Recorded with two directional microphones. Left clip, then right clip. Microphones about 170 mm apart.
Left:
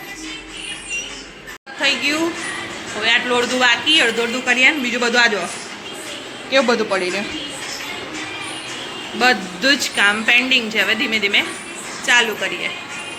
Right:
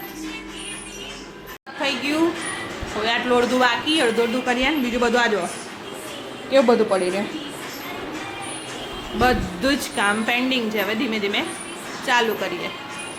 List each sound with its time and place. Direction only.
1.8 s a woman's voice: 10° right (ahead or behind)
3.0 s speech: 30° right (ahead or behind)
4.4 s a woman's voice: 20° right (ahead or behind)
6.7 s a woman's voice: 15° right (ahead or behind)
9.1 s a woman's voice: 15° right (ahead or behind)